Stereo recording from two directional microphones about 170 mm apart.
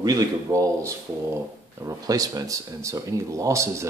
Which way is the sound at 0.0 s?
20° right (ahead or behind).